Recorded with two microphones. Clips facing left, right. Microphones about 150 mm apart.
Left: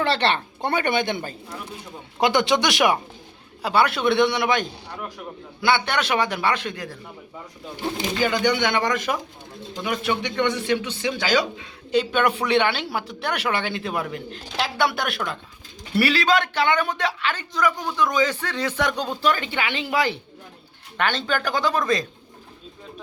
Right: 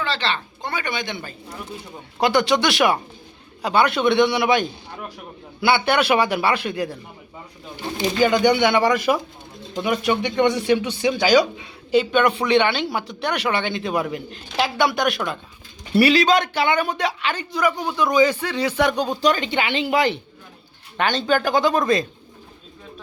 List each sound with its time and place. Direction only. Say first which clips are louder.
0.0 s a woman's voice: left 3 dB; 60° left (ahead or behind); by 1.4 s 45° left (ahead or behind)
2.2 s speech: right 1 dB; 20° left (ahead or behind)
3.6 s a man's voice: right 2 dB; 5° left (ahead or behind)
8.2 s a man's voice: right 5 dB; 15° right (ahead or behind)
11.9 s speech: right 3 dB; 5° left (ahead or behind)
16.0 s a man's voice: right 4 dB; 20° right (ahead or behind)
21.0 s speech: right 4 dB; 40° right (ahead or behind)